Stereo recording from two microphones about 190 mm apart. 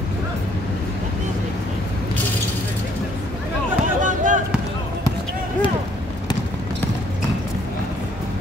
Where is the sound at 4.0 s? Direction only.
40° right (ahead or behind).